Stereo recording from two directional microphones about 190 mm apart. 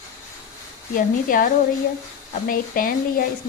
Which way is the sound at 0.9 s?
45° left (ahead or behind).